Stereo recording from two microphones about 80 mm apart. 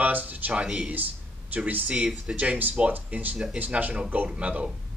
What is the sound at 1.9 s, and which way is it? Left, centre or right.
Speech, centre.